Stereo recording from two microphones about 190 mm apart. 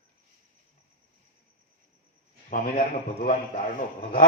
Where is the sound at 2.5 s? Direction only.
45° left (ahead or behind).